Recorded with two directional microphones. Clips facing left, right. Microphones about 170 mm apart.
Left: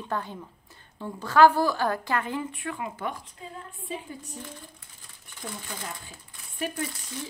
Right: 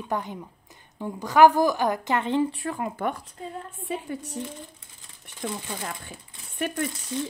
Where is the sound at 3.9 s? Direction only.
70° right (ahead or behind).